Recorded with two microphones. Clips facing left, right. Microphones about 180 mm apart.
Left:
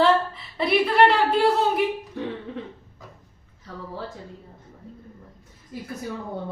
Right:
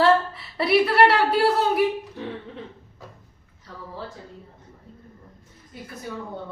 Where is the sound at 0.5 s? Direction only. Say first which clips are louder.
Right 1 dB; 5° right (ahead or behind).